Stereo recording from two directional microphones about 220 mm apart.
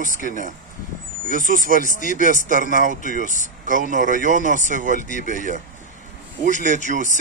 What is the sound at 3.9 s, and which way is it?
Speech, 35° right (ahead or behind).